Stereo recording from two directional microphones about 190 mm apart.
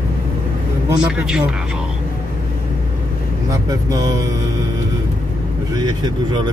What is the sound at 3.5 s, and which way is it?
Speech, 20° right (ahead or behind).